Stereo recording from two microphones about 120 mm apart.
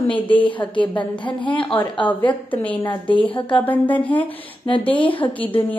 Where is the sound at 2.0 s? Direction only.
10° left (ahead or behind).